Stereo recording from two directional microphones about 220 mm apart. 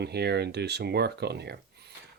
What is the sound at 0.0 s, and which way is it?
Speech, 45° right (ahead or behind).